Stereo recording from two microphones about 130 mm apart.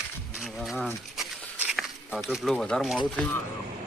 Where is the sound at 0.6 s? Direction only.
Centre (ahead or behind).